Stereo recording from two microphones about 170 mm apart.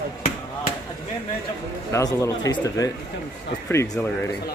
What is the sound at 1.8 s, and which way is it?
Speech, 15° left (ahead or behind).